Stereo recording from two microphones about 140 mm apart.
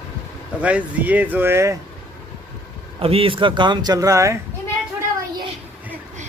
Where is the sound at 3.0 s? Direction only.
40° right (ahead or behind); by 4.4 s 20° right (ahead or behind).